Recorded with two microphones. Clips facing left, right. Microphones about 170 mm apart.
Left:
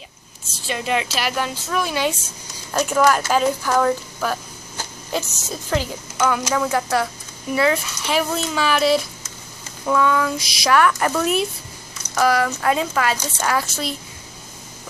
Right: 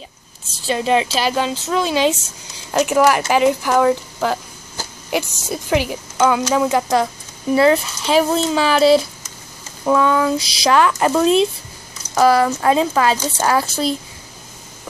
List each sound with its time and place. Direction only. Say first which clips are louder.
0.7 s a woman's voice: right 6 dB; 30° right (ahead or behind)
7.5 s a woman's voice: right 6 dB; 30° right (ahead or behind)